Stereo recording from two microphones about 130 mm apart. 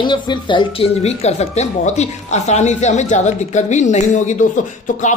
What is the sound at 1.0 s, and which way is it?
A woman's voice, 55° left (ahead or behind).